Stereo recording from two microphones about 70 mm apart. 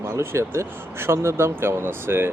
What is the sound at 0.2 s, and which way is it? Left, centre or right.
Speech, right.